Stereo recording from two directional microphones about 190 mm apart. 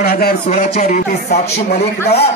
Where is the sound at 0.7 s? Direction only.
35° left (ahead or behind).